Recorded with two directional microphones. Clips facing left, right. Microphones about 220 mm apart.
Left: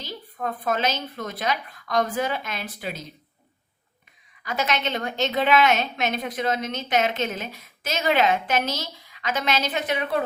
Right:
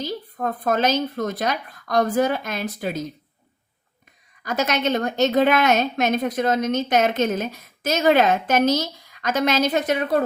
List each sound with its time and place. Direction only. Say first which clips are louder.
0.0 s a woman's voice: right 5 dB; 40° right (ahead or behind)
4.4 s a woman's voice: right 4 dB; 45° right (ahead or behind)